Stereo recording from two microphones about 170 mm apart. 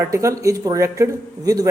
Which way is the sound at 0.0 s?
15° right (ahead or behind).